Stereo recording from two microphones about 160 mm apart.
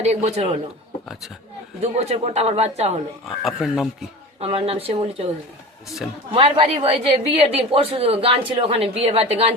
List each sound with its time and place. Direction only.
0.0 s a man's voice: 45° right (ahead or behind)
1.8 s a woman's voice: 40° right (ahead or behind)
3.4 s speech: centre (ahead or behind)
4.4 s a woman's voice: 40° right (ahead or behind)
6.3 s a woman's voice: 35° right (ahead or behind)